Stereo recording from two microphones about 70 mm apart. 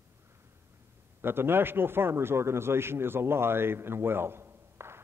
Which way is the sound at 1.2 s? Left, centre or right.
Right.